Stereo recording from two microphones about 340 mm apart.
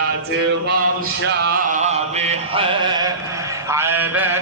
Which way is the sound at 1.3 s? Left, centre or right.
Right.